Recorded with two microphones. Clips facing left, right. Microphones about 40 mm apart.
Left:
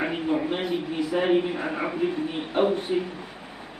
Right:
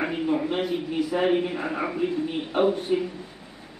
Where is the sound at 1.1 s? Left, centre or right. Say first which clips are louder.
Left 1 dB; centre.